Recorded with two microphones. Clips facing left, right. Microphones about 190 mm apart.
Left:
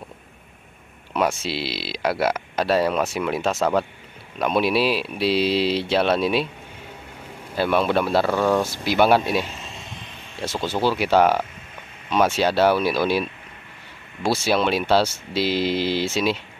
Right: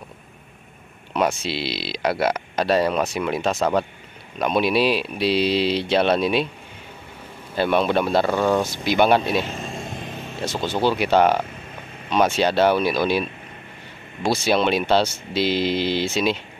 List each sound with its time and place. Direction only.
1.1 s speech: 5° left (ahead or behind)
7.5 s speech: 5° left (ahead or behind)
9.5 s vehicle: 45° right (ahead or behind)
10.4 s speech: 5° left (ahead or behind)
14.2 s speech: 5° left (ahead or behind)